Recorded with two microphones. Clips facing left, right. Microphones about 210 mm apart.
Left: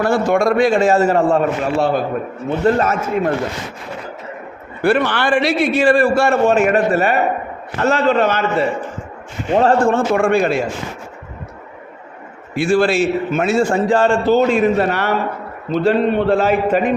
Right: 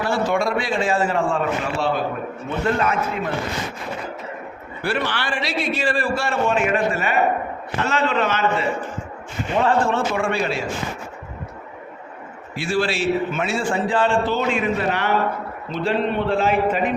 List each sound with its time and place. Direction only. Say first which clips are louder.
0.0 s a man's voice: left 6 dB; 50° left (ahead or behind)
4.8 s a man's voice: left 9 dB; 55° left (ahead or behind)
12.5 s a man's voice: left 8 dB; 50° left (ahead or behind)
15.7 s a man's voice: left 7 dB; 45° left (ahead or behind)